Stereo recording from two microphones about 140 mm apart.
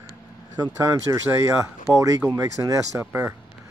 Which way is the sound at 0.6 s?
25° right (ahead or behind).